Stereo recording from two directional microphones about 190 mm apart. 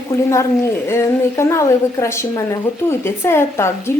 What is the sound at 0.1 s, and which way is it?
A woman's voice, 15° left (ahead or behind).